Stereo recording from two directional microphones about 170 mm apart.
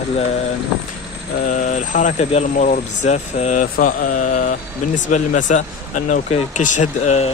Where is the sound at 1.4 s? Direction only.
50° left (ahead or behind).